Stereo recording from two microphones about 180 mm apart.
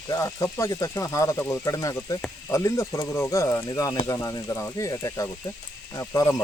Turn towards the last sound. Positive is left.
turn(degrees=20)  # may be behind; listen again after turning